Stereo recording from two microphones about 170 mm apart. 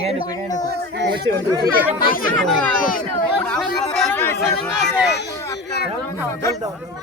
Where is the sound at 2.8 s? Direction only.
55° left (ahead or behind).